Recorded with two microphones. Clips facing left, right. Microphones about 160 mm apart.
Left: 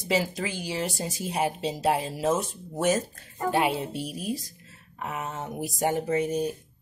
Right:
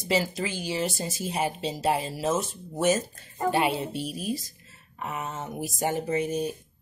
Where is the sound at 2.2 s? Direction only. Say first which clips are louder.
Left 2 dB; 15° left (ahead or behind).